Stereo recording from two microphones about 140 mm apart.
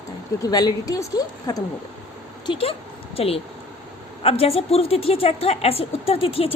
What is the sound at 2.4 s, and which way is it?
A woman's voice, 40° left (ahead or behind).